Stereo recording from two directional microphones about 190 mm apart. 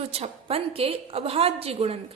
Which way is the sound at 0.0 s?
30° right (ahead or behind).